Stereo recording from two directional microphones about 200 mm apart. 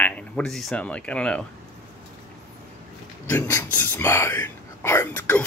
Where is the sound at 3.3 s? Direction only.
15° left (ahead or behind).